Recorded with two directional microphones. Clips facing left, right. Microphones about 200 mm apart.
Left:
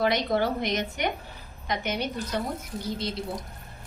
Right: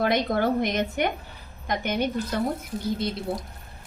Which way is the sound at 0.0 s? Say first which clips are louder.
Right 2 dB; 50° right (ahead or behind).